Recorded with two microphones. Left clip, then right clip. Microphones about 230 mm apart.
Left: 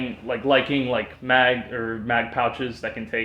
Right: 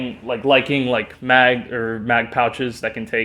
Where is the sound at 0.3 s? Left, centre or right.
Right.